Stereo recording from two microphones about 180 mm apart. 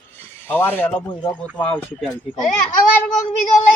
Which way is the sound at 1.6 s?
5° left (ahead or behind).